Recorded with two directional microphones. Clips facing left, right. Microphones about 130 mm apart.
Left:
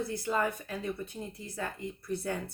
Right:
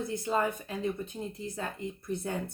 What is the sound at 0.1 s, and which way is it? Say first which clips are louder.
A woman's voice: right 1 dB; 25° right (ahead or behind).